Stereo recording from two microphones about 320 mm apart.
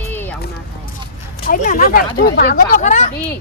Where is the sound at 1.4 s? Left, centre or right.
Left.